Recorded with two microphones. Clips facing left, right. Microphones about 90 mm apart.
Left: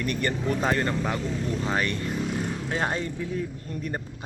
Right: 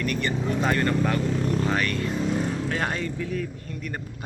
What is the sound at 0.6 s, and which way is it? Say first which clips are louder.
Speech: right 3 dB; 25° left (ahead or behind).